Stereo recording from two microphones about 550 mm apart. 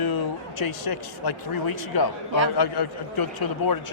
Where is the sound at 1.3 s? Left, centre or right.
Left.